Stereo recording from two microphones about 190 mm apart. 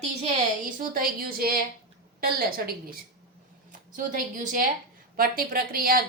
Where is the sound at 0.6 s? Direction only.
45° right (ahead or behind).